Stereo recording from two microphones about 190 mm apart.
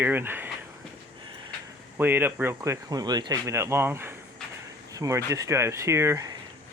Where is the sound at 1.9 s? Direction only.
10° right (ahead or behind).